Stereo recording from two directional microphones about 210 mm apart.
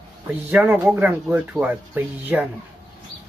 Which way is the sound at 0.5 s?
5° right (ahead or behind).